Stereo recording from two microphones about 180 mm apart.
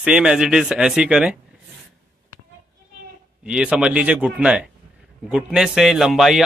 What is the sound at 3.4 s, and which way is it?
Speech, 5° right (ahead or behind).